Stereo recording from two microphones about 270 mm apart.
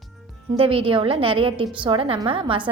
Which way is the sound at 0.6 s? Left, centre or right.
Centre.